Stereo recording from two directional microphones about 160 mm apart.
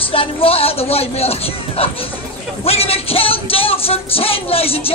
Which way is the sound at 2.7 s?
40° left (ahead or behind).